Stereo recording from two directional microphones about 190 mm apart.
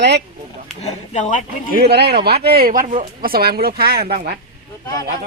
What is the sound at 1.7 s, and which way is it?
Speech, 55° right (ahead or behind).